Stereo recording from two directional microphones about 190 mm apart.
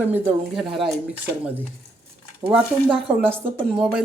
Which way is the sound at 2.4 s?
5° right (ahead or behind).